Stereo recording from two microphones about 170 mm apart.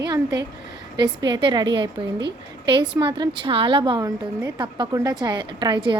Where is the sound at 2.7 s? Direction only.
25° right (ahead or behind).